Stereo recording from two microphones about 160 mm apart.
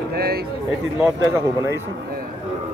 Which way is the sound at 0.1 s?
75° right (ahead or behind).